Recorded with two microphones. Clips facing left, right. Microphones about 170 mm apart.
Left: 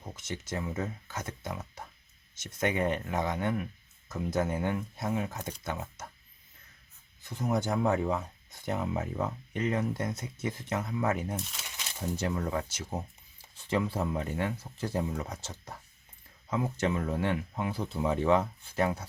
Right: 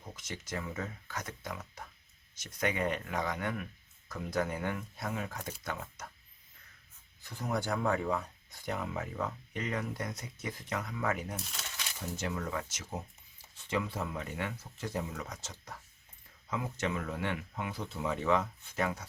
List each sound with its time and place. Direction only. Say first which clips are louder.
0.0 s speech: left 5 dB; 25° left (ahead or behind)
7.2 s speech: left 5 dB; 20° left (ahead or behind)